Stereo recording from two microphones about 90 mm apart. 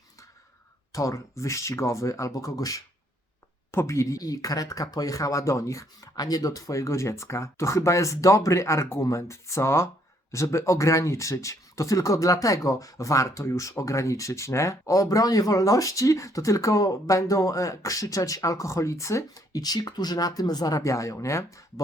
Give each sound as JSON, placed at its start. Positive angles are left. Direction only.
{"t": 0.9, "sound": "speech", "side_deg": 35}
{"t": 3.7, "sound": "speech", "side_deg": 30}